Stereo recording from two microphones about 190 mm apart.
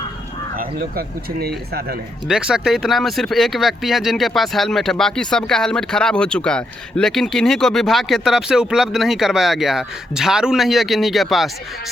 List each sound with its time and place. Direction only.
0.5 s speech: 50° right (ahead or behind)
2.2 s speech: 5° right (ahead or behind)